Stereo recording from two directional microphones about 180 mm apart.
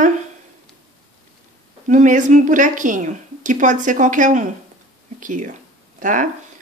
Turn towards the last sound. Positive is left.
turn(degrees=-45)  # may be behind; listen again after turning